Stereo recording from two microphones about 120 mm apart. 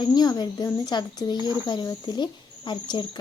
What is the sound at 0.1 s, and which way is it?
Speech, 35° left (ahead or behind).